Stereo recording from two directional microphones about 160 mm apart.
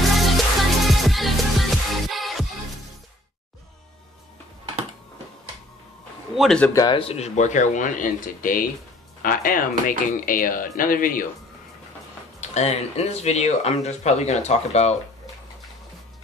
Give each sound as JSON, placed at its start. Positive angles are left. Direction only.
{"t": 0.1, "sound": "music", "side_deg": 0}
{"t": 6.3, "sound": "a man's voice", "side_deg": 0}
{"t": 6.7, "sound": "a man's voice", "side_deg": 20}
{"t": 7.0, "sound": "speech", "side_deg": 40}
{"t": 12.4, "sound": "speech", "side_deg": 45}